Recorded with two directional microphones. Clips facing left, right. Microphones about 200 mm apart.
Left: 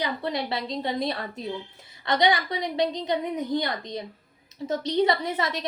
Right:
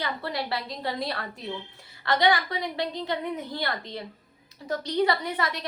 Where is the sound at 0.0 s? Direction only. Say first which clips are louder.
Left 3 dB; 20° left (ahead or behind).